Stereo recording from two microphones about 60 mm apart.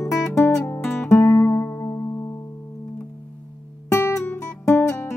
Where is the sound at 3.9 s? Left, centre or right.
Left.